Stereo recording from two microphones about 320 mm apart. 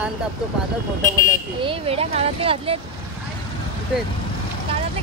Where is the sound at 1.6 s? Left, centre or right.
Centre.